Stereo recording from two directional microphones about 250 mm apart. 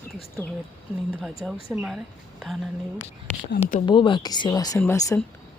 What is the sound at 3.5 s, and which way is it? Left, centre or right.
Speech, left.